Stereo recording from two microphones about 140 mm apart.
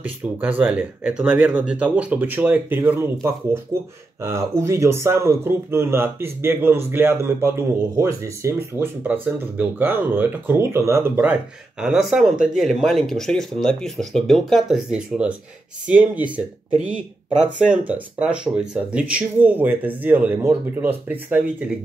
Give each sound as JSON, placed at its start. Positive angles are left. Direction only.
{"t": 0.4, "sound": "speech", "side_deg": -10}
{"t": 11.8, "sound": "speech", "side_deg": -5}